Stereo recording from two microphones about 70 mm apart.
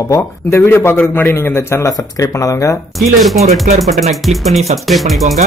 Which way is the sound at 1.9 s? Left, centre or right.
Left.